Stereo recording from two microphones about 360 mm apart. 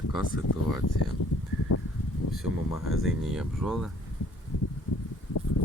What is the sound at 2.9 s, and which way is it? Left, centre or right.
Speech, centre.